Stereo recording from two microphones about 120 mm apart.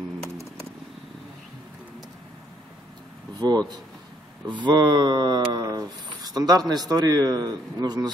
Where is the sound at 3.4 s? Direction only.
35° right (ahead or behind).